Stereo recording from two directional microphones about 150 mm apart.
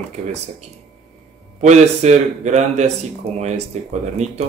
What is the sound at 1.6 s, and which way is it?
Speech, 50° right (ahead or behind).